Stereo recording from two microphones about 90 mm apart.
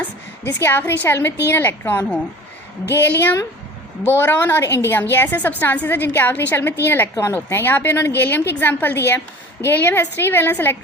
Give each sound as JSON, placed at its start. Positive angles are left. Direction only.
{"t": 0.0, "sound": "a woman's voice", "side_deg": 25}